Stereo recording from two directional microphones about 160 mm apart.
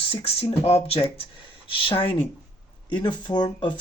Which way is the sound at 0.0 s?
40° left (ahead or behind).